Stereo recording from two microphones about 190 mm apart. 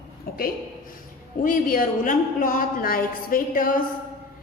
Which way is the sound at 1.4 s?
45° left (ahead or behind).